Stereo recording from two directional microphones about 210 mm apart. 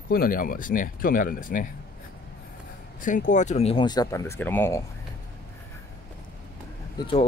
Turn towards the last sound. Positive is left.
turn(degrees=25)  # may be behind; listen again after turning